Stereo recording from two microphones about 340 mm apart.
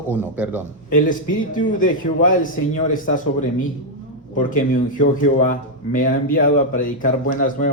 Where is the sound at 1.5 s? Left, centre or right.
Left.